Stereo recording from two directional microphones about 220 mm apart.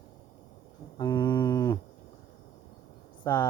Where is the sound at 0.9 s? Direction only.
20° left (ahead or behind).